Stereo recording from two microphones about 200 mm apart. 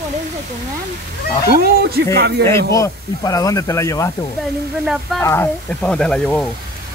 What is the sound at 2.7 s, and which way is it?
Speech, 15° left (ahead or behind).